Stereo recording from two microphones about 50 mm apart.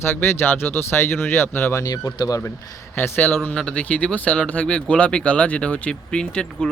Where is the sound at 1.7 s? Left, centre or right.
Left.